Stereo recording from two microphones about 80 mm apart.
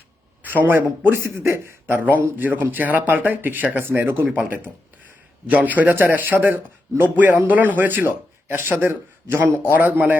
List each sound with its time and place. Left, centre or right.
0.4 s speech: right